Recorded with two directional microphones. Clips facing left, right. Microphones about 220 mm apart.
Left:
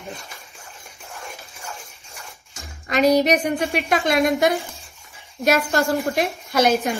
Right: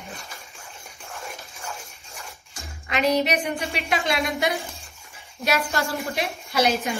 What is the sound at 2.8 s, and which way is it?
A woman's voice, 40° left (ahead or behind).